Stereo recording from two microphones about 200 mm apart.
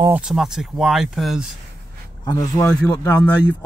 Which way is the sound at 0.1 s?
5° right (ahead or behind).